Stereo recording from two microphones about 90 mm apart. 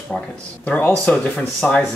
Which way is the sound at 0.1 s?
10° left (ahead or behind).